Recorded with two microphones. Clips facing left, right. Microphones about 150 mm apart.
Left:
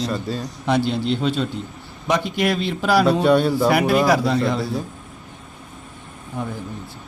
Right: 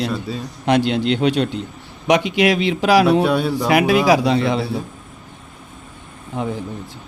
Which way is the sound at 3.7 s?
90° right.